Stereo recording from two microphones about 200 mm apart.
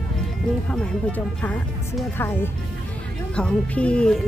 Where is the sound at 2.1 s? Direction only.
10° left (ahead or behind).